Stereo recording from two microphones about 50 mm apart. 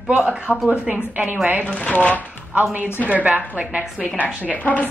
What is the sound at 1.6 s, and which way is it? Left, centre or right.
Speech, left.